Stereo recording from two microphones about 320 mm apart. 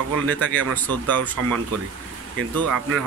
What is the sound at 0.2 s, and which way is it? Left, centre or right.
Speech, right.